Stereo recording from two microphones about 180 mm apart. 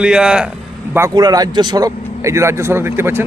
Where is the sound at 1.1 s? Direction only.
20° right (ahead or behind).